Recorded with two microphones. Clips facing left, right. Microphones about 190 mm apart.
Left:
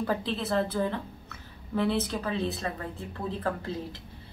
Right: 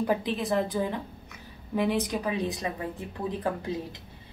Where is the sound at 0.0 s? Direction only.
15° right (ahead or behind).